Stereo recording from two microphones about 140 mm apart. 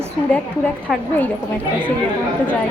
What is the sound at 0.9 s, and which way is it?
Speech, 5° right (ahead or behind).